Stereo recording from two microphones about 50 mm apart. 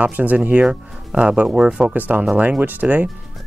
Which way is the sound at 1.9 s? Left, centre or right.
Right.